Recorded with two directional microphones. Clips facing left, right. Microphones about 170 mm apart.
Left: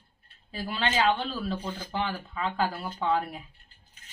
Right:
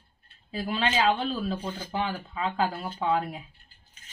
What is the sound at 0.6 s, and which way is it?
Speech, 5° right (ahead or behind).